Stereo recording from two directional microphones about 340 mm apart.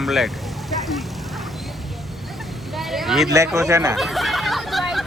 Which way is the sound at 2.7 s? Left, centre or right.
Centre.